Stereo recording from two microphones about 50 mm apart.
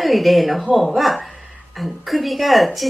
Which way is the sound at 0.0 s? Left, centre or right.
Centre.